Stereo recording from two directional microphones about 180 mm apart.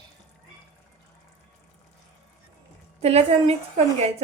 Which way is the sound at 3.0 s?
35° right (ahead or behind).